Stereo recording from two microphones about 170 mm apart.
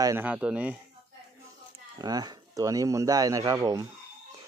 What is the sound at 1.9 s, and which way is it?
Speech, 25° right (ahead or behind).